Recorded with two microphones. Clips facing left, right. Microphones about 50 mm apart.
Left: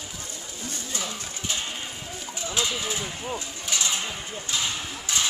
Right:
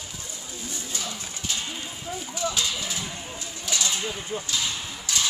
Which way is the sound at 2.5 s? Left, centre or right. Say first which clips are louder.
Left 1 dB; left.